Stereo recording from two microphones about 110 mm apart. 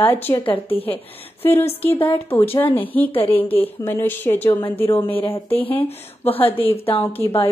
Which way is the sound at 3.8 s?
20° left (ahead or behind).